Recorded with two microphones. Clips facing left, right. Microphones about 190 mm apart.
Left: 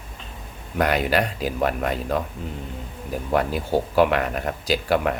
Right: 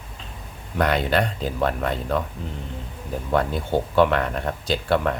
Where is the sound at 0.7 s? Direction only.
10° left (ahead or behind).